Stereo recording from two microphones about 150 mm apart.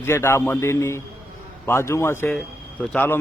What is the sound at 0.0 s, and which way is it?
Speech, 15° left (ahead or behind).